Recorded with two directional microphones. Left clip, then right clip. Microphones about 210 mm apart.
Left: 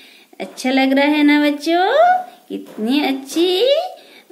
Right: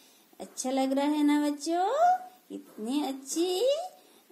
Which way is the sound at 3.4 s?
25° right (ahead or behind).